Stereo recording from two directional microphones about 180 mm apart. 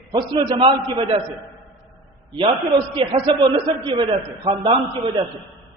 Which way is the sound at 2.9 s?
30° right (ahead or behind).